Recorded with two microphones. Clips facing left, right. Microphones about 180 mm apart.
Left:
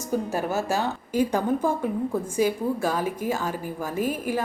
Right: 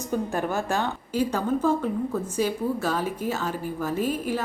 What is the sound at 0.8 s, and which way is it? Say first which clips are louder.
Speech: left 2 dB; 50° left (ahead or behind).